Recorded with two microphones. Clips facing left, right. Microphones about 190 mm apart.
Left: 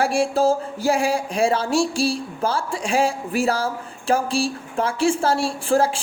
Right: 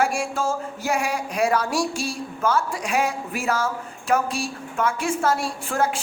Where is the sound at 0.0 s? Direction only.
30° left (ahead or behind).